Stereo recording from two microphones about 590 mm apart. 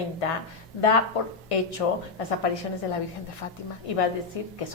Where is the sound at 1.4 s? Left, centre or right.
Left.